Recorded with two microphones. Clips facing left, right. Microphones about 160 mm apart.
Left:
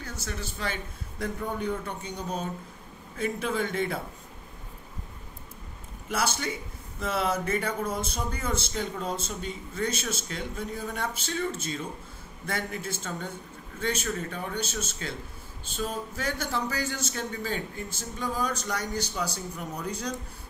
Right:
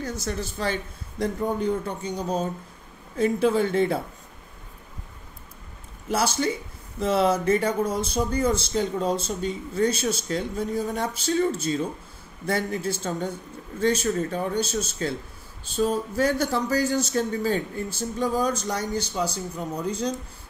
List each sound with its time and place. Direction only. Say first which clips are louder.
0.0 s speech: right 7 dB; 40° right (ahead or behind)
6.0 s speech: right 6 dB; 30° right (ahead or behind)